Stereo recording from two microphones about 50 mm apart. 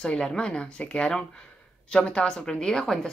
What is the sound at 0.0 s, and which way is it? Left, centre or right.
A woman's voice, centre.